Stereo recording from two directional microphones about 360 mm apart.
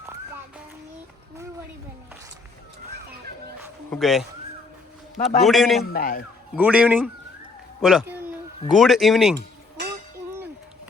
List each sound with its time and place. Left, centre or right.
3.6 s bow-wow: centre
5.4 s speech: centre
5.8 s a man's voice: left
6.6 s a woman's voice: centre